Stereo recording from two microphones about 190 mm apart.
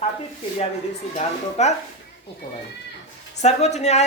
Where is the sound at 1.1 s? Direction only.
35° left (ahead or behind).